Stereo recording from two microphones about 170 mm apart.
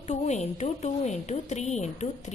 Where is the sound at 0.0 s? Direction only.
40° left (ahead or behind).